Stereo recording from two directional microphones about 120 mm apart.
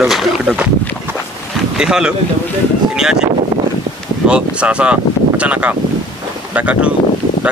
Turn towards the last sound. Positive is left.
turn(degrees=-10)  # may be behind; listen again after turning